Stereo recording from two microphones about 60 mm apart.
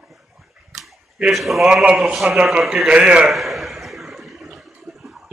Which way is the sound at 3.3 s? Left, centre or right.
Centre.